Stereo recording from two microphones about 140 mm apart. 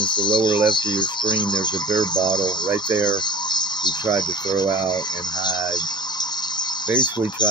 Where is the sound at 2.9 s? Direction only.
30° left (ahead or behind).